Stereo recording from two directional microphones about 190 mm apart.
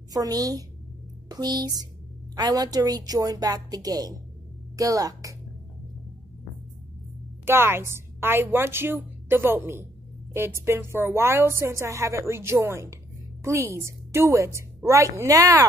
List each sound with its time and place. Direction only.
0.1 s a woman's voice: 20° right (ahead or behind)
7.4 s speech: 10° right (ahead or behind)